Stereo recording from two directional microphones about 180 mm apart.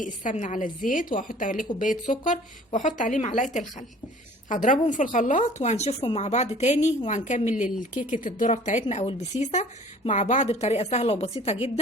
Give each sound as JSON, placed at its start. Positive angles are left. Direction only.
{"t": 0.0, "sound": "a woman's voice", "side_deg": 45}